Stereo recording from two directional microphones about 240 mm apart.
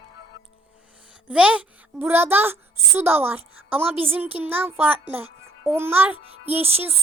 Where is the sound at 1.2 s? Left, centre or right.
Centre.